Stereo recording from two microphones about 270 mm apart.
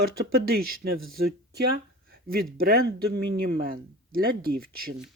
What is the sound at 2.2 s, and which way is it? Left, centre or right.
Speech, right.